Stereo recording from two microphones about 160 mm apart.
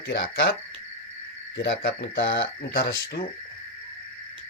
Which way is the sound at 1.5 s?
85° left.